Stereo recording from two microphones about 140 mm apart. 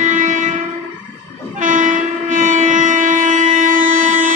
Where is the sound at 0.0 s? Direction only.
65° right (ahead or behind).